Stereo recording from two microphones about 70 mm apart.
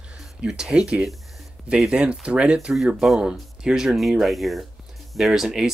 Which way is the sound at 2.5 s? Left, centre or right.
Centre.